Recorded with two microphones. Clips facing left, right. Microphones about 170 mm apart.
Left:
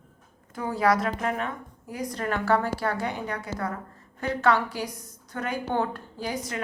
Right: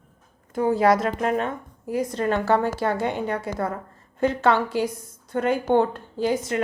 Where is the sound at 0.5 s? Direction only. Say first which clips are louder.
Right 5 dB; 25° right (ahead or behind).